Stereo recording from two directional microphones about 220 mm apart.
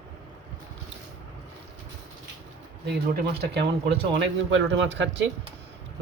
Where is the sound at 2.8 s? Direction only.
50° right (ahead or behind).